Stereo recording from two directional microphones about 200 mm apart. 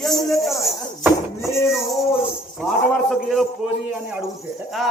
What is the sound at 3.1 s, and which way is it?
Speech, centre (ahead or behind).